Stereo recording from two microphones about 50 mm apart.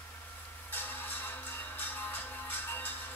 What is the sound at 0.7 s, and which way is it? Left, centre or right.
Music, left.